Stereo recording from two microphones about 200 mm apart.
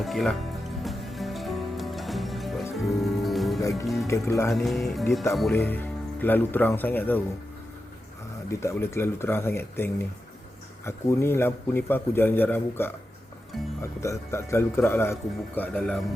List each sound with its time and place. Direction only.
0.0 s speech: centre (ahead or behind)
0.8 s music: centre (ahead or behind)
3.6 s music: 15° left (ahead or behind)
4.0 s a man's voice: 15° left (ahead or behind)
4.5 s speech: centre (ahead or behind)
5.5 s a man's voice: 10° left (ahead or behind)
8.4 s a man's voice: 15° left (ahead or behind)
14.0 s a man's voice: 15° left (ahead or behind)